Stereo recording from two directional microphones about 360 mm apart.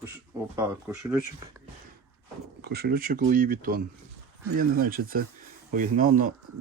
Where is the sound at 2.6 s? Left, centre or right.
Right.